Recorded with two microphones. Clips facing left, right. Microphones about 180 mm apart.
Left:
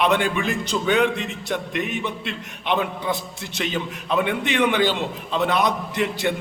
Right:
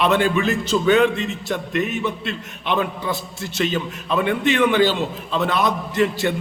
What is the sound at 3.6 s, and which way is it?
A man's voice, 15° left (ahead or behind).